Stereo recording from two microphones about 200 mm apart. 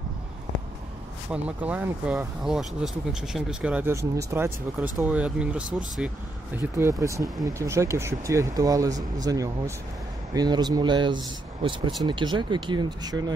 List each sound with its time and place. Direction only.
1.3 s speech: 5° right (ahead or behind)